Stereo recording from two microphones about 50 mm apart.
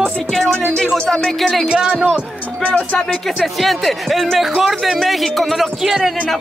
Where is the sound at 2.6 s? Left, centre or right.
Left.